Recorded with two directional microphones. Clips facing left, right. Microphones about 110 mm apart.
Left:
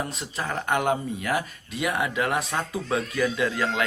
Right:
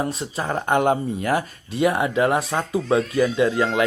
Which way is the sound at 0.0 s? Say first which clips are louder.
Right 5 dB; 30° right (ahead or behind).